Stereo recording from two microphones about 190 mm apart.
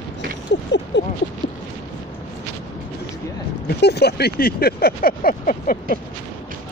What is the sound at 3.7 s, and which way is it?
Speech, 60° left (ahead or behind).